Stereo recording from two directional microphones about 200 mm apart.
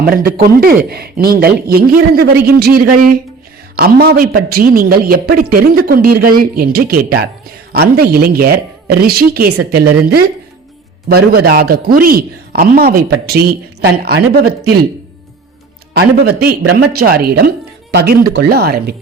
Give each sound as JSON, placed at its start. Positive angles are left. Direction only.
{"t": 0.0, "sound": "a man's voice", "side_deg": -50}
{"t": 16.0, "sound": "a man's voice", "side_deg": -50}